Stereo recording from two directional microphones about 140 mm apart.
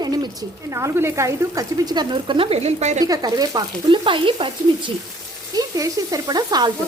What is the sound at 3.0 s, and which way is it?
Speech, 25° right (ahead or behind).